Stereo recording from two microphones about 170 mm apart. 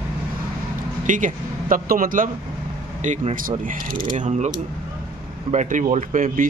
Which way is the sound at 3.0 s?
40° right (ahead or behind).